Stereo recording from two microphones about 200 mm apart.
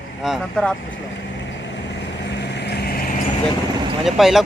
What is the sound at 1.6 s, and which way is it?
Vehicle, 60° left (ahead or behind).